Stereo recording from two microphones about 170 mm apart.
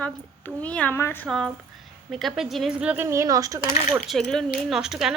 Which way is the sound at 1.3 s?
Centre (ahead or behind).